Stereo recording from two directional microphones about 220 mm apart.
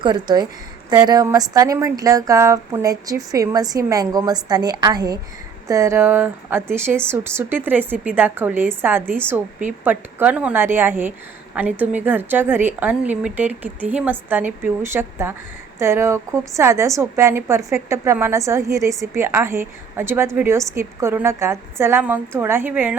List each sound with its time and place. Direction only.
0.0 s a woman's voice: 20° right (ahead or behind)